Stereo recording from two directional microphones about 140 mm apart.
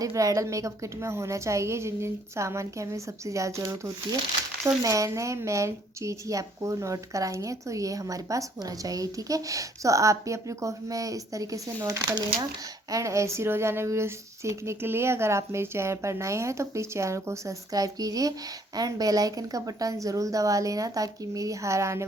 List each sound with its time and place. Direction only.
0.0 s speech: 25° right (ahead or behind)